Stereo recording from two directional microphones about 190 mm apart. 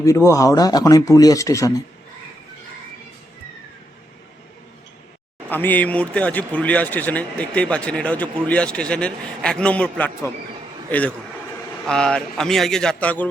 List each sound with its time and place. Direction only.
0.0 s speech: 15° left (ahead or behind)
5.5 s speech: 10° left (ahead or behind)
11.9 s a man's voice: 5° left (ahead or behind)